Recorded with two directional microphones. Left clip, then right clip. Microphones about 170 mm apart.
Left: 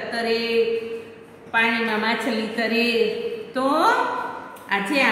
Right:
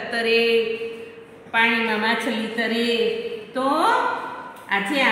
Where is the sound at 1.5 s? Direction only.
30° right (ahead or behind).